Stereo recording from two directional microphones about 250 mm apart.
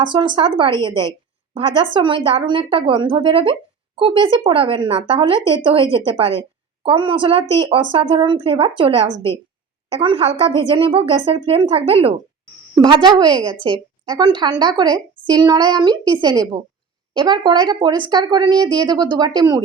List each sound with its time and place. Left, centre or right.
0.0 s speech: centre